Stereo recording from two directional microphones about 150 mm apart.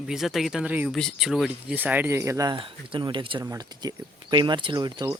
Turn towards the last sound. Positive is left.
turn(degrees=-25)  # may be behind; listen again after turning